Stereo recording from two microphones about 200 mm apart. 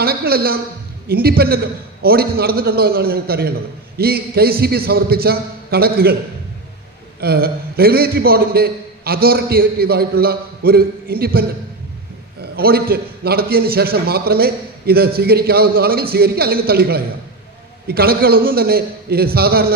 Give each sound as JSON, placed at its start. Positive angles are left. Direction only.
{"t": 0.0, "sound": "a man's voice", "side_deg": -50}
{"t": 7.2, "sound": "a man's voice", "side_deg": -50}